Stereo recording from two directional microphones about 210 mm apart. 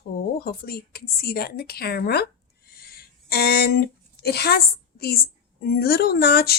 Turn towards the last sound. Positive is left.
turn(degrees=50)  # may be behind; listen again after turning